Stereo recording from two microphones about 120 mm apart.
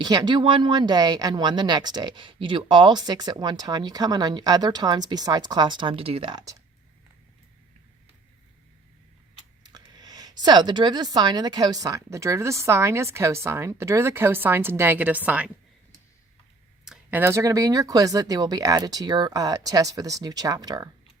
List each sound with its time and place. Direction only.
0.0 s speech: 35° right (ahead or behind); by 6.3 s 50° right (ahead or behind)
6.3 s speech: 30° right (ahead or behind)
9.7 s speech: 35° right (ahead or behind); by 15.4 s 15° right (ahead or behind)
17.1 s speech: 20° right (ahead or behind)